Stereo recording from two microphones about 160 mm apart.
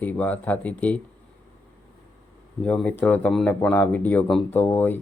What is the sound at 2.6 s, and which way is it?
Speech, 5° left (ahead or behind).